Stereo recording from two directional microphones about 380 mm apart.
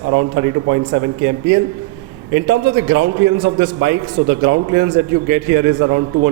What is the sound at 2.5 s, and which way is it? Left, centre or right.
A man's voice, right.